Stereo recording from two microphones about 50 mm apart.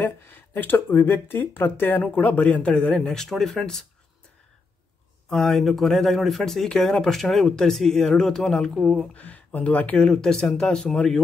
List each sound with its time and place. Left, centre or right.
0.0 s speech: left
3.1 s speech: centre
5.3 s speech: centre
9.1 s speech: left
10.0 s speech: centre